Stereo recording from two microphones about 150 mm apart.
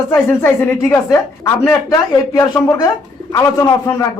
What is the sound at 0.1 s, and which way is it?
A man's voice, 15° left (ahead or behind).